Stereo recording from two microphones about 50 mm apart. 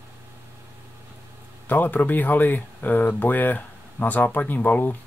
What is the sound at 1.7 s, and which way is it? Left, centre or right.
Speech, left.